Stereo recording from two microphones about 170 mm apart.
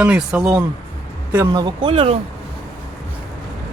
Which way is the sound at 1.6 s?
30° right (ahead or behind).